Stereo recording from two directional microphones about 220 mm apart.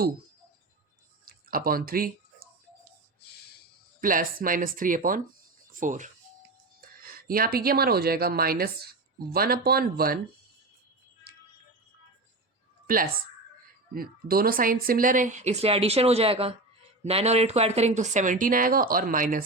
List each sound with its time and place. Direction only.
1.2 s speech: 40° right (ahead or behind)
4.0 s speech: 40° right (ahead or behind)
11.3 s music: 45° right (ahead or behind)
12.9 s speech: 40° right (ahead or behind)